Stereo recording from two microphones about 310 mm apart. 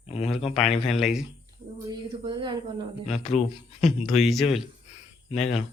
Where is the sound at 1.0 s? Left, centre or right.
Centre.